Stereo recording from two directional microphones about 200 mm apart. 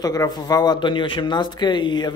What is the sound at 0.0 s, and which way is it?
Speech, 20° left (ahead or behind).